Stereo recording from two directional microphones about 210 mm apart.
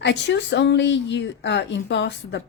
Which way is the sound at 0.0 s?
55° left (ahead or behind).